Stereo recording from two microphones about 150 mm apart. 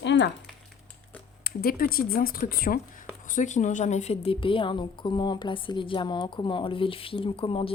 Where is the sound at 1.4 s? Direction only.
80° left.